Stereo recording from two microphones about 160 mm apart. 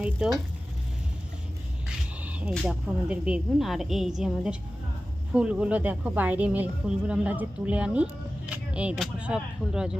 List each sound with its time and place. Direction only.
0.2 s speech: 5° right (ahead or behind)
2.2 s speech: 5° right (ahead or behind)
5.3 s speech: 5° right (ahead or behind)